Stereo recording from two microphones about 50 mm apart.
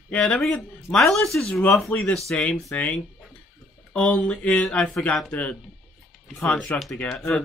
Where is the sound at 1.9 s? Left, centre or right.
Left.